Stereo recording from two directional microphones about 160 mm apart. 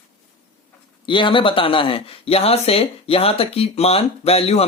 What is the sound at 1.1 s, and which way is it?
Speech, 30° left (ahead or behind).